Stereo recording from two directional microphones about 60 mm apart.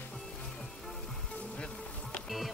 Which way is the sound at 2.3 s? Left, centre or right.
Centre.